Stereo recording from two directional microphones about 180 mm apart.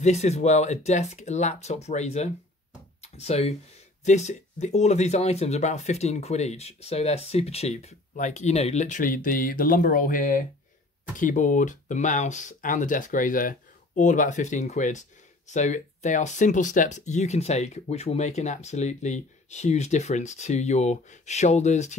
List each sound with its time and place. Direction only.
0.0 s speech: 40° left (ahead or behind)
3.0 s a sound: 35° left (ahead or behind)
4.0 s speech: 40° left (ahead or behind)